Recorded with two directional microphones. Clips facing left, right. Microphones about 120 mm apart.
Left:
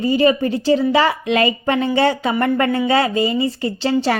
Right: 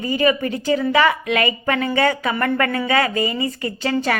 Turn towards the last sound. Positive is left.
turn(degrees=30)  # may be behind; listen again after turning